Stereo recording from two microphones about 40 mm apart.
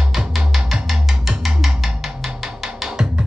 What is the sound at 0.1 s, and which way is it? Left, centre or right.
Music, centre.